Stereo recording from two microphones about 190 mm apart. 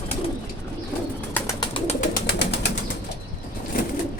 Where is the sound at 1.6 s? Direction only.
25° left (ahead or behind).